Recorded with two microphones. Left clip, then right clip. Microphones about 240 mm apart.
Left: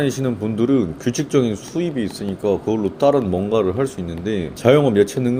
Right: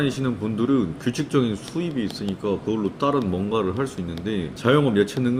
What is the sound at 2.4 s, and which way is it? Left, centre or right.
Speech, left.